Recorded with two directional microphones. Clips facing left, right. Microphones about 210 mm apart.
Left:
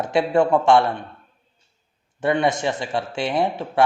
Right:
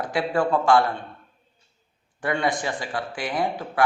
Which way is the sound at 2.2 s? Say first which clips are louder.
Left 5 dB; 25° left (ahead or behind).